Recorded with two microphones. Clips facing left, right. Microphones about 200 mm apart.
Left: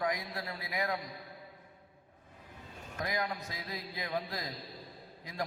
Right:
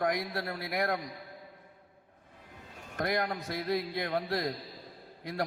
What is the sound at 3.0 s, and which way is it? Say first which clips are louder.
A man's voice: right 5 dB; 65° right (ahead or behind).